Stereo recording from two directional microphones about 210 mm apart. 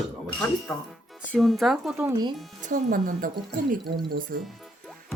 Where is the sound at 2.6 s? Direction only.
40° right (ahead or behind).